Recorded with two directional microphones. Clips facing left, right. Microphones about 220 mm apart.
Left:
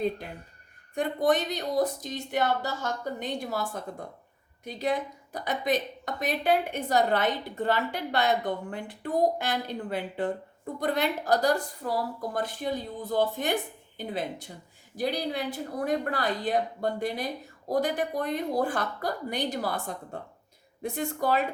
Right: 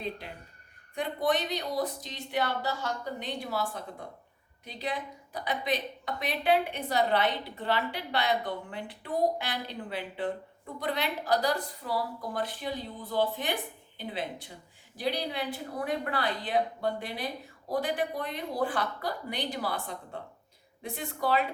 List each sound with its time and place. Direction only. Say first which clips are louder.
0.9 s a woman's voice: left 4 dB; 45° left (ahead or behind)